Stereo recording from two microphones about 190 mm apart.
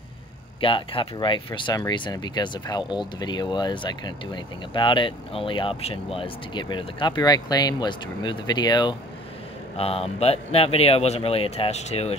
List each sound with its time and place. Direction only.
0.6 s speech: 25° left (ahead or behind)